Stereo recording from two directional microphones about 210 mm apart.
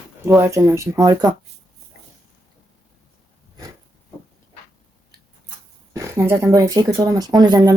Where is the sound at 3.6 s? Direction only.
20° right (ahead or behind).